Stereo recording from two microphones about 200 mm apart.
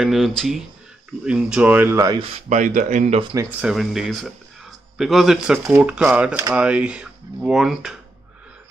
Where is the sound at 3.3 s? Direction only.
5° right (ahead or behind).